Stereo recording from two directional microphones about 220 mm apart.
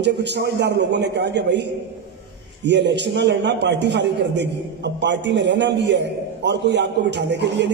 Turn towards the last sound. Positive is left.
turn(degrees=-50)  # may be behind; listen again after turning